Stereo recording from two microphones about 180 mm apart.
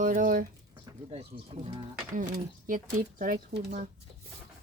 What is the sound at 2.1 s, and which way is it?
Speech, 50° right (ahead or behind).